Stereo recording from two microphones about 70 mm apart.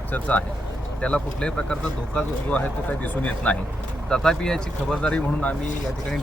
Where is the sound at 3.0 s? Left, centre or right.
Left.